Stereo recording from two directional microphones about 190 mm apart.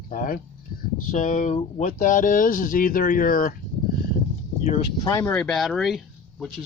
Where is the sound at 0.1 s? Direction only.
45° left (ahead or behind).